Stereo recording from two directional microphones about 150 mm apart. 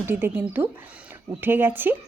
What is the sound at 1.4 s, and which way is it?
Speech, 15° right (ahead or behind).